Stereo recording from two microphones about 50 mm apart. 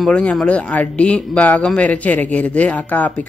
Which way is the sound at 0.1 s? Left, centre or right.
Left.